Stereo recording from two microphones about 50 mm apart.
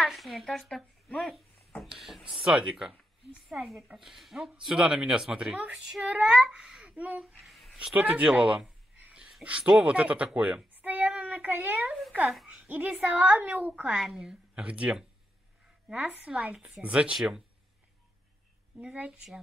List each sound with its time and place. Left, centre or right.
0.1 s a woman's voice: centre
2.0 s speech: centre
3.5 s a woman's voice: centre
6.0 s a child's voice: right
7.4 s a sound: centre
7.9 s a child's voice: right
10.7 s child singing: right
12.4 s a sound: right
13.0 s a woman's voice: right
13.8 s speech: centre
14.5 s a child's voice: right